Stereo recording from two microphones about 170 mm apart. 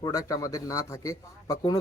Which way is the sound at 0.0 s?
20° left (ahead or behind).